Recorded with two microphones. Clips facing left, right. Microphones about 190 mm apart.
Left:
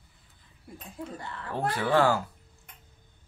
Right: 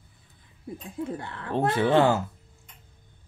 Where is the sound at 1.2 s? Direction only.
60° right (ahead or behind).